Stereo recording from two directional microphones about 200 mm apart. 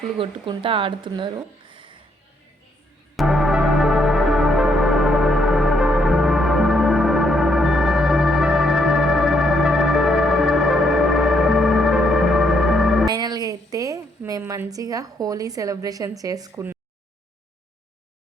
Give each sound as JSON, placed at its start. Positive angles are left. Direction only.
{"t": 0.2, "sound": "speech", "side_deg": -25}
{"t": 3.2, "sound": "music", "side_deg": 0}
{"t": 13.1, "sound": "a sound", "side_deg": -20}